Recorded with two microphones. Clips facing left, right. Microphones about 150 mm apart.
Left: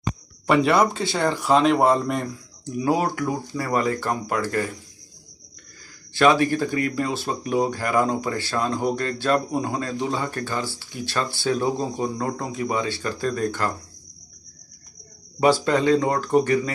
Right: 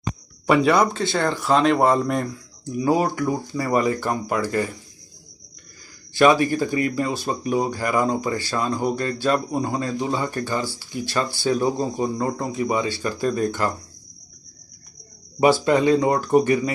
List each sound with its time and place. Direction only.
0.5 s speech: 5° left (ahead or behind)
6.1 s speech: 5° right (ahead or behind)
15.4 s speech: 10° right (ahead or behind)